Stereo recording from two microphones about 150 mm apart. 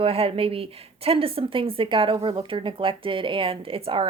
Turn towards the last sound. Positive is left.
turn(degrees=-35)  # may be behind; listen again after turning